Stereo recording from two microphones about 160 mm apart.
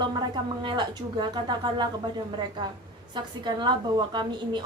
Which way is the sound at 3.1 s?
30° right (ahead or behind).